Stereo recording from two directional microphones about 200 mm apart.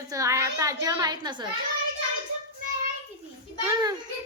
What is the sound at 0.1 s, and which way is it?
A woman's voice, 15° right (ahead or behind).